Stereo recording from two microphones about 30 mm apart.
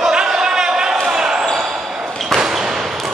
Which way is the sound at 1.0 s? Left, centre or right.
Right.